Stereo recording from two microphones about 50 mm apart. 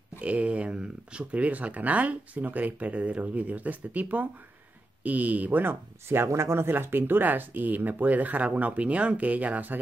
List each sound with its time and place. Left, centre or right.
0.2 s speech: right
6.2 s speech: right